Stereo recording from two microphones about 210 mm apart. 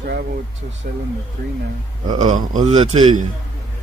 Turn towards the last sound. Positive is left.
turn(degrees=-20)  # may be behind; listen again after turning